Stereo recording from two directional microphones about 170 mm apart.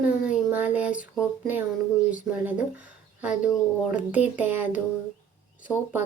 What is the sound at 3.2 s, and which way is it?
A woman's voice, 5° right (ahead or behind).